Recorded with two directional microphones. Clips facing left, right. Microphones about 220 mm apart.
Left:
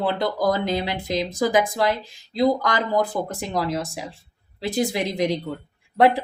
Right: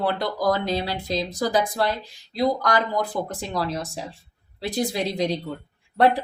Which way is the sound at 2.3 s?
20° left (ahead or behind).